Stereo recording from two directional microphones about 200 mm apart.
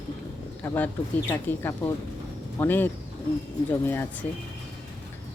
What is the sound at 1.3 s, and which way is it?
Speech, 10° left (ahead or behind).